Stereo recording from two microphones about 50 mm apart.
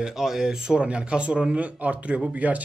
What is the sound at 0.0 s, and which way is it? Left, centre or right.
A man's voice, centre.